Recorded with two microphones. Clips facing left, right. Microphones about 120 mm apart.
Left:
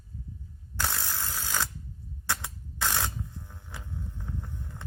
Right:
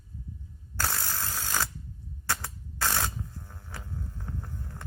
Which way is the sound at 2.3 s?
5° right (ahead or behind).